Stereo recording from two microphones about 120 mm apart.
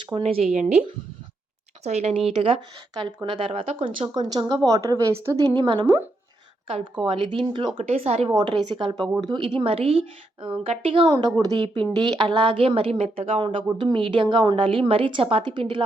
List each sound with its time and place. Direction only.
0.2 s speech: 60° right (ahead or behind)
0.5 s speech: 80° right
1.8 s speech: 65° right (ahead or behind)
2.3 s a woman's voice: 50° right (ahead or behind)
2.9 s a woman's voice: 35° right (ahead or behind)
4.1 s a woman's voice: 35° right (ahead or behind)
5.5 s speech: 35° right (ahead or behind)
7.1 s a woman's voice: 45° right (ahead or behind)
7.8 s speech: 60° right (ahead or behind)
8.3 s a woman's voice: 35° right (ahead or behind)
11.3 s a woman's voice: 35° right (ahead or behind)